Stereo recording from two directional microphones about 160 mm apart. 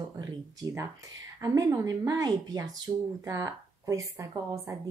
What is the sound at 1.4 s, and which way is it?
Speech, 20° right (ahead or behind).